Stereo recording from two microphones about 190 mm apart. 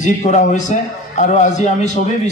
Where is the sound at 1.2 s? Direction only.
40° left (ahead or behind).